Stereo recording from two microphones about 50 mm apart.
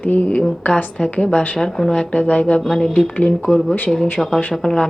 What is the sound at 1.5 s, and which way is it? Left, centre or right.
Speech, centre.